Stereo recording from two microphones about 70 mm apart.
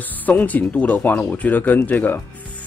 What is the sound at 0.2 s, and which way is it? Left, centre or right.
Speech, left.